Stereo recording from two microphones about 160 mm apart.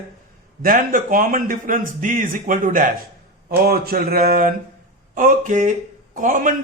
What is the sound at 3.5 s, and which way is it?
A man's voice, 70° right (ahead or behind).